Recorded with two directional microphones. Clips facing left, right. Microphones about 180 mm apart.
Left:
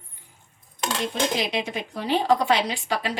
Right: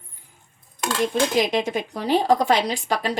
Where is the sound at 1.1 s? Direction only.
45° right (ahead or behind).